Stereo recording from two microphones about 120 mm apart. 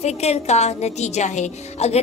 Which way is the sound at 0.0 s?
65° left (ahead or behind).